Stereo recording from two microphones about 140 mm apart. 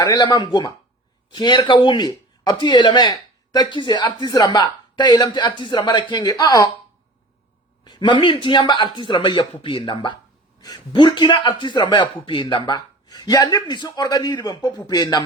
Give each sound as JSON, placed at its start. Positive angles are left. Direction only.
{"t": 0.0, "sound": "speech", "side_deg": 30}
{"t": 7.9, "sound": "a man's voice", "side_deg": 35}